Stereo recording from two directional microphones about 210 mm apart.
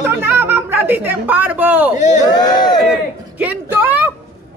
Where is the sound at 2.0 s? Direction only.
35° left (ahead or behind).